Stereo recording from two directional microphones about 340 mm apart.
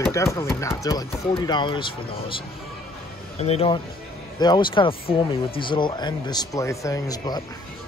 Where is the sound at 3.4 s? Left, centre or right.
Centre.